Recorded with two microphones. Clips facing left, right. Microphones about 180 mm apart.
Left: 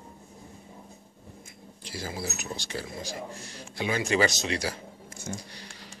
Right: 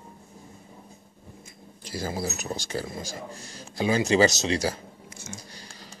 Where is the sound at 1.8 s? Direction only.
45° right (ahead or behind).